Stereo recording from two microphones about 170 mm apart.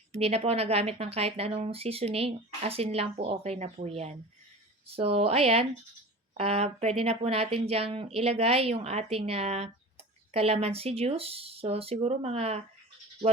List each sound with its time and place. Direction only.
0.1 s speech: 35° right (ahead or behind)